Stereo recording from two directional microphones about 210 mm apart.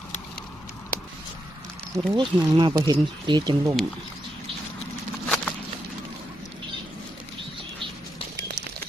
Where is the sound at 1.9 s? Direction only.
20° right (ahead or behind).